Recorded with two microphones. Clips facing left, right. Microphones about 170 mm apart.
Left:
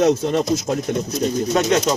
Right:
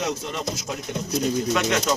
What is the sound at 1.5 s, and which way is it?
Speech, 35° left (ahead or behind).